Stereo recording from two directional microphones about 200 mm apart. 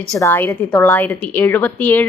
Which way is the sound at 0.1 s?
15° left (ahead or behind).